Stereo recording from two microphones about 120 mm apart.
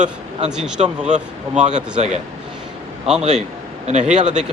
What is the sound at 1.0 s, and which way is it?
Speech, 80° right.